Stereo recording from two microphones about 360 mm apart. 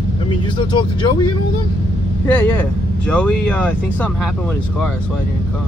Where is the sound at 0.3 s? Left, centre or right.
Centre.